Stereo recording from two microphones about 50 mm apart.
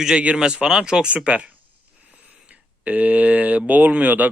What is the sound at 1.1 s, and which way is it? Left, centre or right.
Speech, right.